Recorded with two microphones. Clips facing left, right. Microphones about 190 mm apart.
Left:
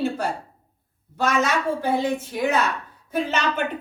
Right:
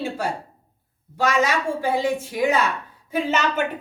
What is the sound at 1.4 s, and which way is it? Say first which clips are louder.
Speech: right 1 dB; 10° right (ahead or behind).